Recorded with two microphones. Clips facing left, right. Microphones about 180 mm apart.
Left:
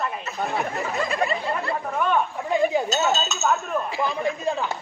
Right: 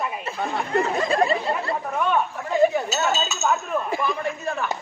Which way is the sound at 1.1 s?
30° right (ahead or behind).